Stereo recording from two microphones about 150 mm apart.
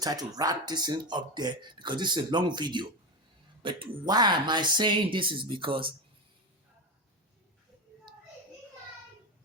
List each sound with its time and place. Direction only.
0.0 s speech: 25° right (ahead or behind)